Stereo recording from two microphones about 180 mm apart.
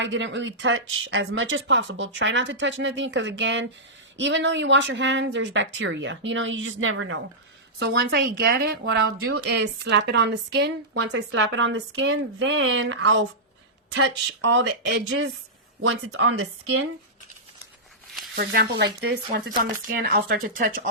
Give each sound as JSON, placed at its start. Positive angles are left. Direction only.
{"t": 0.0, "sound": "speech", "side_deg": -90}
{"t": 7.8, "sound": "speech", "side_deg": -65}
{"t": 15.8, "sound": "speech", "side_deg": -90}
{"t": 18.1, "sound": "a sound", "side_deg": 0}
{"t": 18.3, "sound": "speech", "side_deg": -65}